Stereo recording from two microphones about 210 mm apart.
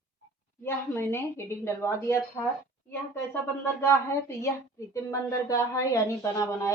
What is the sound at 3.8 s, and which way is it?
Speech, 10° left (ahead or behind).